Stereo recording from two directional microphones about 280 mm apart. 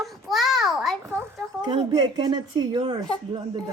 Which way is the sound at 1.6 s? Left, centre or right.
Centre.